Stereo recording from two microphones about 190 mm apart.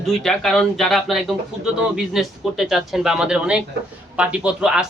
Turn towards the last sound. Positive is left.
turn(degrees=-5)  # may be behind; listen again after turning